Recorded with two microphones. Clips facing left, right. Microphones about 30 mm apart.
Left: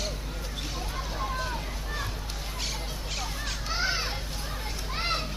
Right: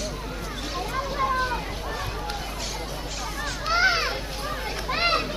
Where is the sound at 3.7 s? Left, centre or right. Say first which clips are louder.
Right 9 dB; right.